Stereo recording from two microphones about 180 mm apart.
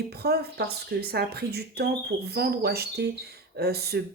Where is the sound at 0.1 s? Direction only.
60° right (ahead or behind).